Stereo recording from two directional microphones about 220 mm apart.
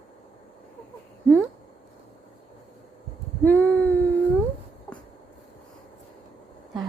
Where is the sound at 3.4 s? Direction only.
5° left (ahead or behind).